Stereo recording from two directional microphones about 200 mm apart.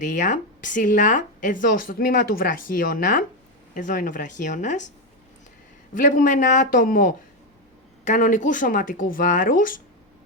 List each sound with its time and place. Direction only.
0.0 s speech: 40° left (ahead or behind)
5.9 s speech: 40° left (ahead or behind)